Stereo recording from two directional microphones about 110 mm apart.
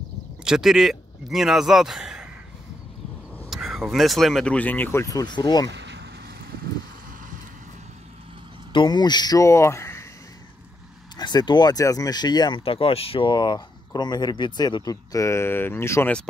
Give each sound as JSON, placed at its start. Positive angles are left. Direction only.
{"t": 0.4, "sound": "speech", "side_deg": -5}
{"t": 3.4, "sound": "speech", "side_deg": -5}
{"t": 8.7, "sound": "speech", "side_deg": 40}
{"t": 11.1, "sound": "speech", "side_deg": 40}
{"t": 12.6, "sound": "speech", "side_deg": 60}
{"t": 13.3, "sound": "speech", "side_deg": 40}